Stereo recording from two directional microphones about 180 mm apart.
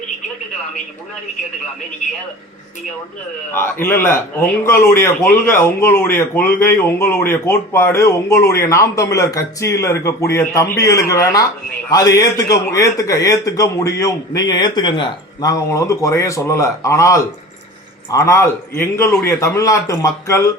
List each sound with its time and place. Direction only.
3.5 s speech: 15° left (ahead or behind)